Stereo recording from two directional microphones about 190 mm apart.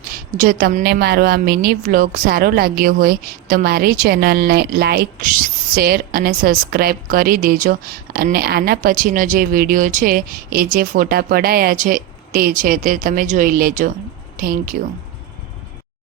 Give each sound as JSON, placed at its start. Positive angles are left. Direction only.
{"t": 0.0, "sound": "a woman's voice", "side_deg": -50}